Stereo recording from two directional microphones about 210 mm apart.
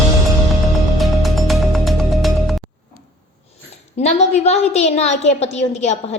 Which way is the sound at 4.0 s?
30° left (ahead or behind).